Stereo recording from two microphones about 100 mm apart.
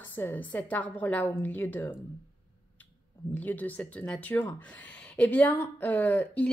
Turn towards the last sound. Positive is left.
turn(degrees=15)  # may be behind; listen again after turning